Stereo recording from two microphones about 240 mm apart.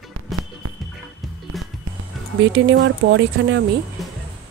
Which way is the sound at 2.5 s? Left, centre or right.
Right.